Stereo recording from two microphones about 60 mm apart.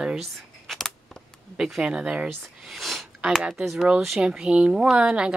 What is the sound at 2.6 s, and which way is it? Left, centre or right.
Speech, centre.